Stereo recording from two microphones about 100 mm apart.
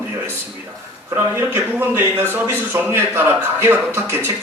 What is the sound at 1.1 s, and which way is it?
A man's voice, 25° right (ahead or behind).